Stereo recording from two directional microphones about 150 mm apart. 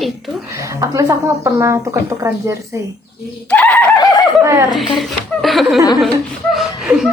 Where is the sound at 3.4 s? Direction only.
10° left (ahead or behind).